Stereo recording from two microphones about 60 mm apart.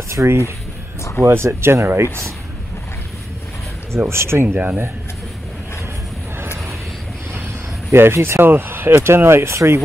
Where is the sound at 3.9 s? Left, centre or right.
Right.